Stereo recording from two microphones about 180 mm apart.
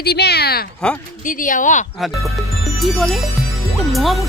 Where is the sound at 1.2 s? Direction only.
45° left (ahead or behind).